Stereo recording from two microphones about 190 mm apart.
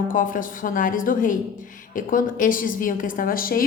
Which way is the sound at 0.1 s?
45° left (ahead or behind).